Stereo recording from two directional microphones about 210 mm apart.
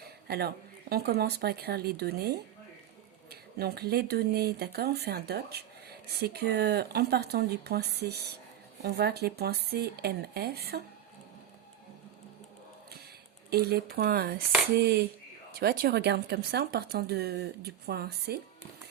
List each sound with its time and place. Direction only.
0.0 s a woman's voice: 50° right (ahead or behind)
13.5 s speech: 50° right (ahead or behind)